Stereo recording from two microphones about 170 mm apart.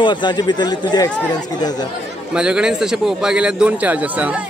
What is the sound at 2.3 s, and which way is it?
A man's voice, 5° right (ahead or behind).